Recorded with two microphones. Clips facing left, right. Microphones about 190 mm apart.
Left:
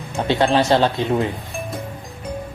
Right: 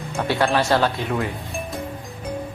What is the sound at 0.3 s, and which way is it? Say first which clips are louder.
Speech: left 3 dB; 20° left (ahead or behind).